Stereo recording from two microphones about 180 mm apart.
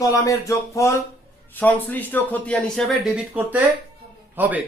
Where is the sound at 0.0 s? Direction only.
20° left (ahead or behind); by 3.1 s 5° left (ahead or behind).